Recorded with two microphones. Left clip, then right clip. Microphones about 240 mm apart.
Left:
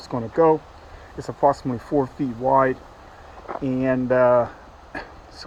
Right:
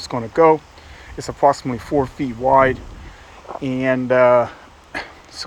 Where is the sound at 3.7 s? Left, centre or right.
Right.